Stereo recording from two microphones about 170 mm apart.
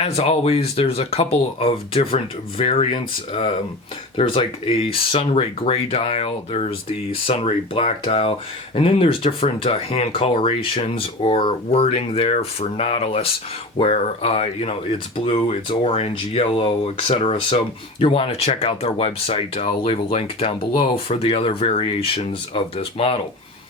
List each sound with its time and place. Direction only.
0.0 s speech: 35° left (ahead or behind)